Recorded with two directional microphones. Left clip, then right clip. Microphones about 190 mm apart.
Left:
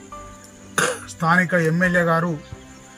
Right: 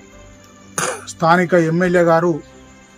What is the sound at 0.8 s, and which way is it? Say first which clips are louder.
Speech: right 2 dB; 70° right (ahead or behind).